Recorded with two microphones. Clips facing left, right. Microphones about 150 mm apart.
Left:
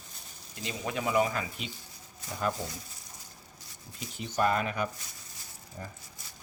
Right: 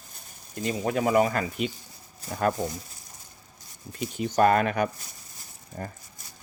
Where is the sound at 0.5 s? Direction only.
45° right (ahead or behind).